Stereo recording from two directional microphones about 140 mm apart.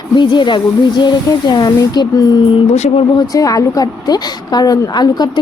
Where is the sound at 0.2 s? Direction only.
35° left (ahead or behind).